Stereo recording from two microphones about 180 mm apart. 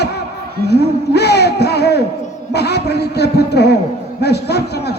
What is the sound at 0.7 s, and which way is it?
A man's voice, 65° left (ahead or behind).